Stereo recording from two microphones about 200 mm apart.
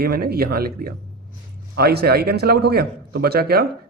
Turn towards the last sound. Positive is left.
turn(degrees=-50)  # may be behind; listen again after turning